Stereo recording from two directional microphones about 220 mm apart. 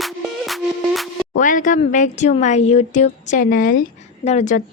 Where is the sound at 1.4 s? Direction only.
35° left (ahead or behind).